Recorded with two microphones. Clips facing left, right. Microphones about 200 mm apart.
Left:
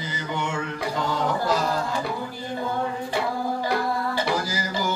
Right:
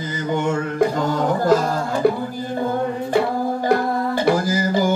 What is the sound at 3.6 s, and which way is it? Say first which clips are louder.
Music: right 8 dB; 50° right (ahead or behind).